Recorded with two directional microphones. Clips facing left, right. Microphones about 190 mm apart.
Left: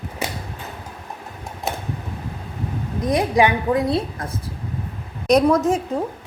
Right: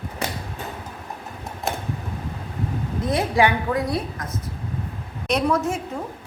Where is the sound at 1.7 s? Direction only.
Centre (ahead or behind).